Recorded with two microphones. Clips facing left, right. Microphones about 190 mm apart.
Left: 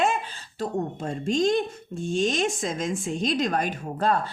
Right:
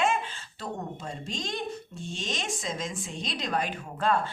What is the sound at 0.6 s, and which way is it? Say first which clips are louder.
A woman's voice: left 8 dB; 50° left (ahead or behind).